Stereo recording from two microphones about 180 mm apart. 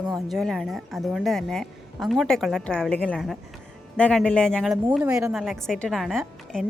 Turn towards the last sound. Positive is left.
turn(degrees=0)  # may be behind; listen again after turning